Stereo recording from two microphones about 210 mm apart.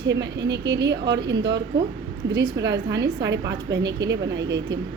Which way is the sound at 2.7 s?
55° right (ahead or behind).